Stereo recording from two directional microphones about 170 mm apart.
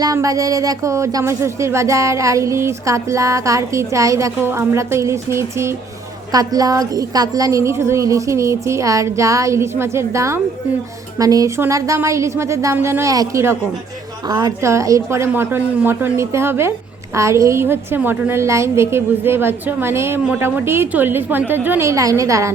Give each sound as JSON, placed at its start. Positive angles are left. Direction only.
{"t": 0.0, "sound": "a woman's voice", "side_deg": -20}